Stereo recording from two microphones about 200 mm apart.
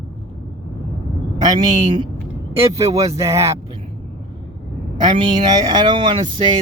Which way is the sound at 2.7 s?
15° right (ahead or behind).